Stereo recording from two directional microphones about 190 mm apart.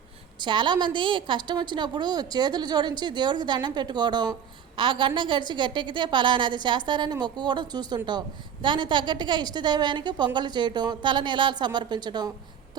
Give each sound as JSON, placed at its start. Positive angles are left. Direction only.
{"t": 0.3, "sound": "a woman's voice", "side_deg": -25}